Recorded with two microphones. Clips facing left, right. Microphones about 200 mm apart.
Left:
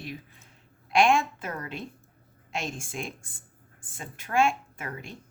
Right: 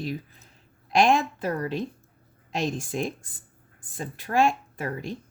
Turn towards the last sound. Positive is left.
turn(degrees=-35)  # may be behind; listen again after turning